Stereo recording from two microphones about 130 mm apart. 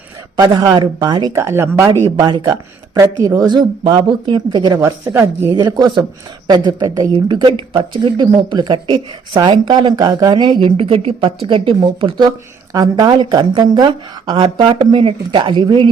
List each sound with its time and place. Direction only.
0.3 s speech: 30° right (ahead or behind)
2.1 s speech: 35° right (ahead or behind)
4.8 s speech: 20° right (ahead or behind); by 15.9 s 35° right (ahead or behind)